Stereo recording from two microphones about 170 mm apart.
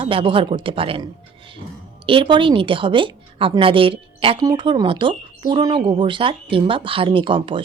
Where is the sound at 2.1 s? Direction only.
30° right (ahead or behind).